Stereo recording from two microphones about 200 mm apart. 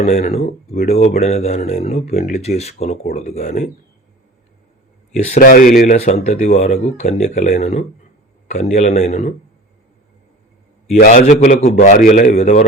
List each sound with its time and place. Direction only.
0.0 s speech: 35° left (ahead or behind)
5.1 s speech: 40° left (ahead or behind)
10.9 s speech: 35° left (ahead or behind)
12.3 s speech: 35° left (ahead or behind)